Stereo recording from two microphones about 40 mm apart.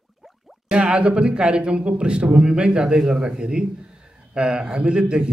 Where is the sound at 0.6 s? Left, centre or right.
Right.